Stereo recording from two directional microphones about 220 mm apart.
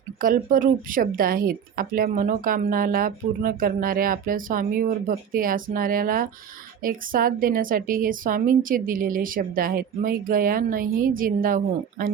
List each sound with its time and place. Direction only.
0.2 s speech: 40° right (ahead or behind)